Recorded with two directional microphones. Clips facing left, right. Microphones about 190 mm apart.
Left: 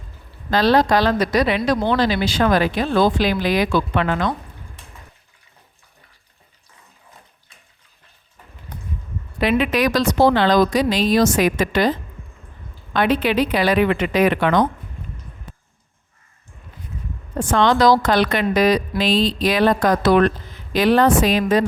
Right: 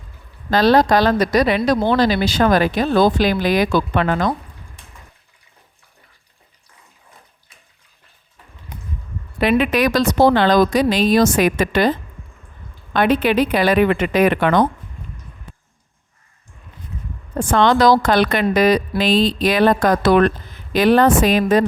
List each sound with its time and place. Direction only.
0.5 s a woman's voice: 45° right (ahead or behind)
9.4 s a woman's voice: 55° right (ahead or behind)
17.4 s a woman's voice: 55° right (ahead or behind)